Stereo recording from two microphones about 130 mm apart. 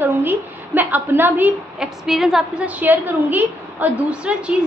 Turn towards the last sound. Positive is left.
turn(degrees=-10)  # may be behind; listen again after turning